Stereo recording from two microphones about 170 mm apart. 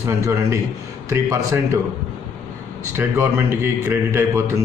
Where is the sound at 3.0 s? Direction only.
15° right (ahead or behind).